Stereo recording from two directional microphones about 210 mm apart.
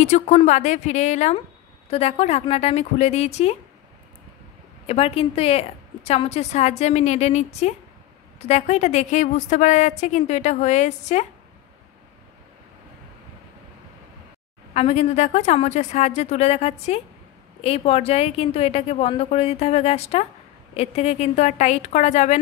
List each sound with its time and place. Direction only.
0.0 s a woman's voice: 35° left (ahead or behind)
4.8 s a woman's voice: 30° left (ahead or behind)
14.7 s a woman's voice: 30° left (ahead or behind)